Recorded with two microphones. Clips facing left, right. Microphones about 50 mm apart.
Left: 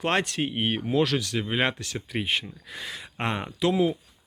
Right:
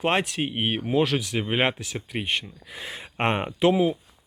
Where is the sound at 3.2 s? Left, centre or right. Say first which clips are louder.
Right 5 dB; right.